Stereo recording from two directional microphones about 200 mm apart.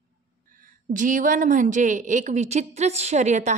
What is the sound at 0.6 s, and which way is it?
A woman's voice, 40° right (ahead or behind).